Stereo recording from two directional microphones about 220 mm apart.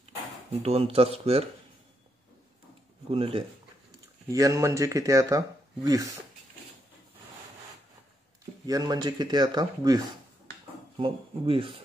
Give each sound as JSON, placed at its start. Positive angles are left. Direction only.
{"t": 0.6, "sound": "speech", "side_deg": -25}
{"t": 3.1, "sound": "speech", "side_deg": -25}
{"t": 8.6, "sound": "speech", "side_deg": -15}